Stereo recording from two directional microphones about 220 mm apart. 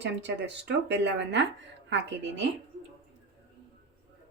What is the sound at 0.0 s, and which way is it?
Speech, 55° right (ahead or behind).